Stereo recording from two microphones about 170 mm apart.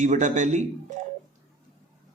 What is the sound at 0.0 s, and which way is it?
Speech, 45° right (ahead or behind).